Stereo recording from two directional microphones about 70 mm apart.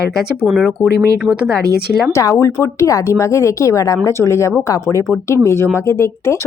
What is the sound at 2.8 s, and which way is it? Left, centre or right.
A woman's voice, left.